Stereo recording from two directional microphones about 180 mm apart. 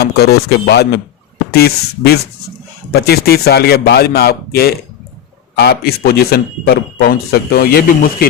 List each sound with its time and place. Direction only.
0.0 s a man's voice: 65° left (ahead or behind)